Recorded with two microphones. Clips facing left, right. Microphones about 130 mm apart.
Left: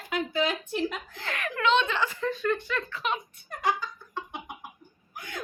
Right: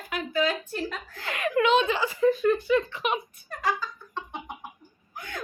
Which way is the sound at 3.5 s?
20° left (ahead or behind).